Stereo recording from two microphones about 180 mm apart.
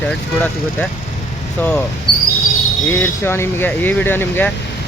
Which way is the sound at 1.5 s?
10° left (ahead or behind).